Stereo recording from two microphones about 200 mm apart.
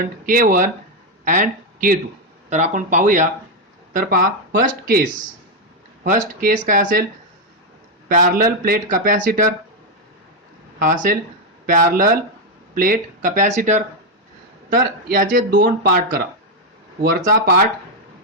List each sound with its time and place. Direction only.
0.0 s speech: 45° right (ahead or behind)
8.0 s a man's voice: 45° right (ahead or behind)
10.8 s speech: 40° right (ahead or behind)